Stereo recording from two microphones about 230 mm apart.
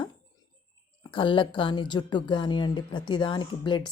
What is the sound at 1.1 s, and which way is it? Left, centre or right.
A woman's voice, left.